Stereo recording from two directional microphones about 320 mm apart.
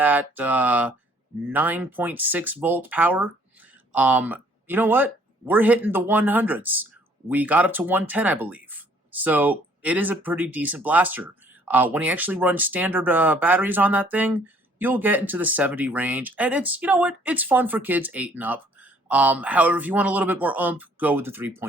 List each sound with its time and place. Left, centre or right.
0.0 s speech: centre